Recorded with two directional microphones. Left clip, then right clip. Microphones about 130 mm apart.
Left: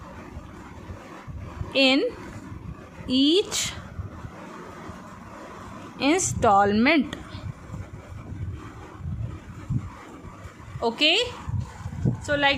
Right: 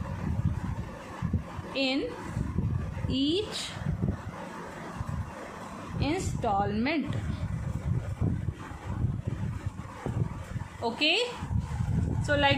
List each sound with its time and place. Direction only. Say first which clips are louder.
1.7 s speech: left 9 dB; 70° left (ahead or behind)
3.1 s a woman's voice: left 8 dB; 60° left (ahead or behind)
6.0 s a woman's voice: left 10 dB; 65° left (ahead or behind)
10.8 s a woman's voice: left 5 dB; 45° left (ahead or behind)
12.2 s speech: left 3 dB; 20° left (ahead or behind)